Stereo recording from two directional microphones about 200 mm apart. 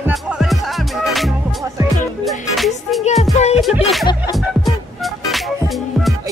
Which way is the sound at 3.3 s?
35° left (ahead or behind).